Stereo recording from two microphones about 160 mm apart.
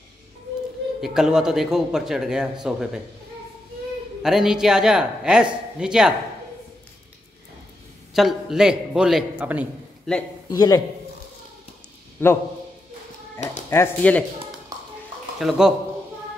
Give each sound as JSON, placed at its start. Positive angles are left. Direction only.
{"t": 1.0, "sound": "speech", "side_deg": -5}
{"t": 4.2, "sound": "speech", "side_deg": -5}
{"t": 8.1, "sound": "speech", "side_deg": 0}
{"t": 10.5, "sound": "a man's voice", "side_deg": 25}
{"t": 12.2, "sound": "speech", "side_deg": 15}
{"t": 13.7, "sound": "speech", "side_deg": 15}
{"t": 15.3, "sound": "speech", "side_deg": -5}